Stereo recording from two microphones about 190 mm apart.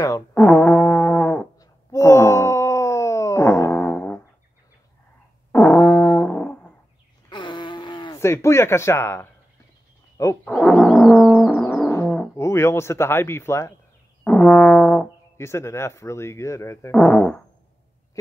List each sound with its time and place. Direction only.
0.3 s brass instrument: 10° left (ahead or behind)
5.5 s music: 10° left (ahead or behind)
7.2 s a sound: 25° left (ahead or behind)
8.2 s speech: 15° left (ahead or behind)
10.4 s brass instrument: 5° left (ahead or behind)
14.2 s speech: 5° left (ahead or behind)